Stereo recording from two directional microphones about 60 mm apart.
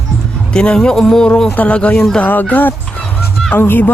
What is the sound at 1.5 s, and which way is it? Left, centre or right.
Speech, left.